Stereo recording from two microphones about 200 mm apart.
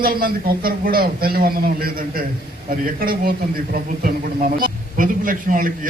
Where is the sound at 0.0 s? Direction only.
50° right (ahead or behind).